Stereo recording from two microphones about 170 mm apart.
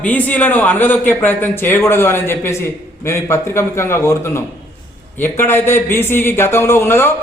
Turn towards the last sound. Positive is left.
turn(degrees=15)  # may be behind; listen again after turning